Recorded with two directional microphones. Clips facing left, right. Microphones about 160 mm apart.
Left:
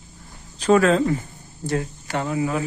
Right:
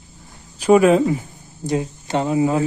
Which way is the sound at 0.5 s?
10° right (ahead or behind).